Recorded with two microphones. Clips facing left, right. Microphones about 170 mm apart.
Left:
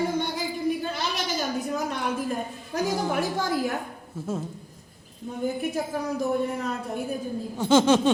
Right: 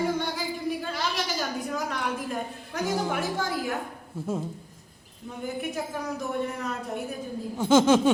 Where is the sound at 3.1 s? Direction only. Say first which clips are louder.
Left 3 dB; 40° left (ahead or behind).